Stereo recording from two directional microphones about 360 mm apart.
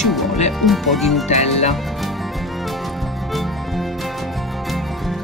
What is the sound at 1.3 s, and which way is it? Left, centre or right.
Speech, centre.